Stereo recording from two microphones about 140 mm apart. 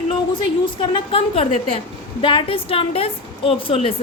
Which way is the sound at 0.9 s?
40° left (ahead or behind).